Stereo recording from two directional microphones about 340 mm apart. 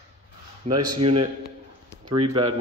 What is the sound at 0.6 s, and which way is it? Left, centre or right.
A man's voice, centre.